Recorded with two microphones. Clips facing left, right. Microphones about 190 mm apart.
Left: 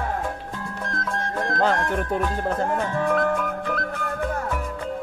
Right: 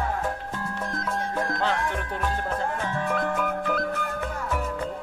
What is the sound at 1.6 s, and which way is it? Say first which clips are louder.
Music: left 8 dB; 45° left (ahead or behind).